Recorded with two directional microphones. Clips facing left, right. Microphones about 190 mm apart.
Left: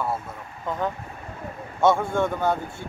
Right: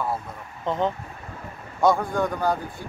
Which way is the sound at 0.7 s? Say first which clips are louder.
Right 3 dB; 25° right (ahead or behind).